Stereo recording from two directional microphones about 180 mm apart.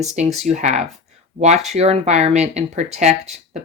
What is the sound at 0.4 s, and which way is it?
Speech, 40° right (ahead or behind).